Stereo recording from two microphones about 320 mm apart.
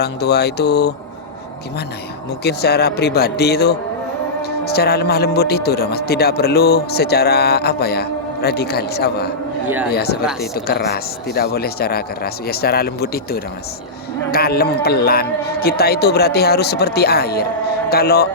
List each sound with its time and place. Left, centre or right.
0.0 s a man's voice: left
2.4 s a man's voice: left